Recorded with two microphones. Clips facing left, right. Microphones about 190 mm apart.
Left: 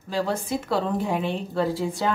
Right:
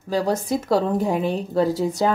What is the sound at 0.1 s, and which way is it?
A woman's voice, 40° right (ahead or behind).